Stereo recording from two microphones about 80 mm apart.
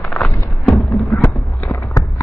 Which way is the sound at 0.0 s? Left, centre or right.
Centre.